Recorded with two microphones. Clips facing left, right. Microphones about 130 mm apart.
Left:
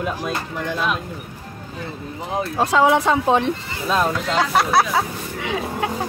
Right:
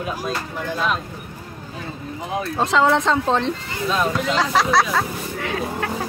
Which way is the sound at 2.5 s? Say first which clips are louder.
Left 1 dB; 10° left (ahead or behind).